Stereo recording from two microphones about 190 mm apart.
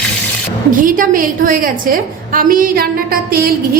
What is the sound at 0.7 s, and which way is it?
A woman's voice, 45° right (ahead or behind).